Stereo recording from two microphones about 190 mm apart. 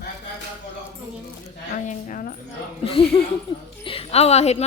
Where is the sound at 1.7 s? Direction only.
40° left (ahead or behind).